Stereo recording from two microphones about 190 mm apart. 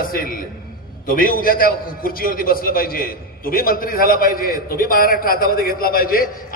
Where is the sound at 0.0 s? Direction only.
50° left (ahead or behind).